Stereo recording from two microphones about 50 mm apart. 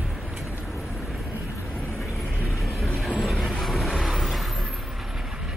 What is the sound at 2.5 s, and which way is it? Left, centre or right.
Vehicle, centre.